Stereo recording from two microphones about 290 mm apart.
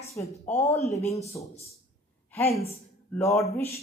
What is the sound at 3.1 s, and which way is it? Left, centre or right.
Speech, centre.